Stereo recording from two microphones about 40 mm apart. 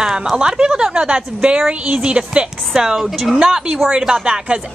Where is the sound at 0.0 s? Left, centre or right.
Centre.